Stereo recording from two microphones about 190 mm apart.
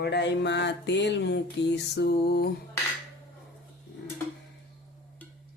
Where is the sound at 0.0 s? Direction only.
65° left (ahead or behind).